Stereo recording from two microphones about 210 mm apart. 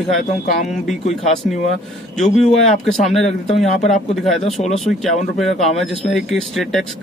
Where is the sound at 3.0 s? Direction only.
Centre (ahead or behind).